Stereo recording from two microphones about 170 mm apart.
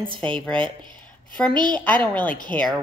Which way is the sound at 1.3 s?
5° left (ahead or behind).